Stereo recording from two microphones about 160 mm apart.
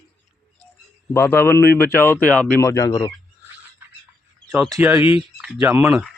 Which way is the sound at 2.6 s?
20° left (ahead or behind).